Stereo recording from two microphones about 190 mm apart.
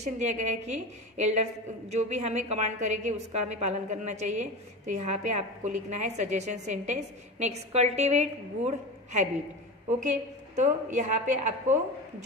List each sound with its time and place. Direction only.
0.0 s a woman's voice: 40° right (ahead or behind)